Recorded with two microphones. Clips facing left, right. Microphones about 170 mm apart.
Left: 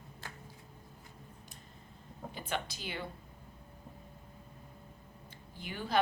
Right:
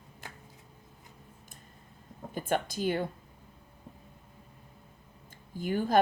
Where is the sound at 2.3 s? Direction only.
50° right (ahead or behind).